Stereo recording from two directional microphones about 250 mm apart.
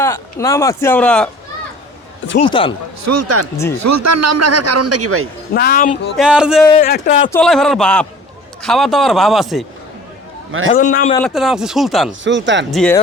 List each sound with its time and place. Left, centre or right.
0.0 s speech: centre
2.4 s speech: left
3.0 s speech: right
3.8 s a man's voice: right
5.5 s speech: left
6.1 s a man's voice: centre
6.8 s speech: left
7.3 s a man's voice: centre
10.7 s speech: left
11.2 s a man's voice: centre
12.2 s speech: right
12.7 s a man's voice: centre